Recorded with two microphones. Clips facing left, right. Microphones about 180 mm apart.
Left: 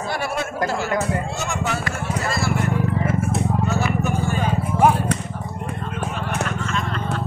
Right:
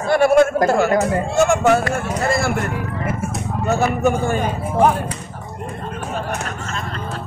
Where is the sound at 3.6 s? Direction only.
50° right (ahead or behind).